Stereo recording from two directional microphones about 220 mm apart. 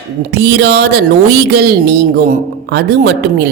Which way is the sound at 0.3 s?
50° right (ahead or behind).